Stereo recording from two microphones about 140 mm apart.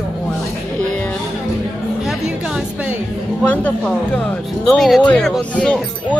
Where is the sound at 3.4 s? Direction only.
10° left (ahead or behind).